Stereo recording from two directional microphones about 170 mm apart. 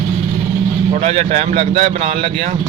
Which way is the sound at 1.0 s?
40° right (ahead or behind).